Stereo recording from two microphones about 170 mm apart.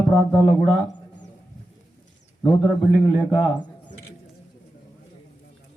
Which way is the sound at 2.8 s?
5° left (ahead or behind).